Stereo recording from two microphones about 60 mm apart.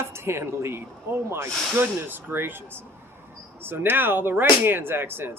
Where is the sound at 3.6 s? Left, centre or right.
Right.